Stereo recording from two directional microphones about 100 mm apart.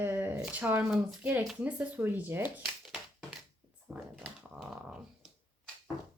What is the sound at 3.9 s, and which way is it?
Speech, 5° right (ahead or behind).